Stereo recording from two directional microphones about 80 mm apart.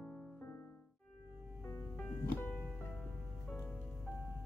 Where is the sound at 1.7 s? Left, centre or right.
Left.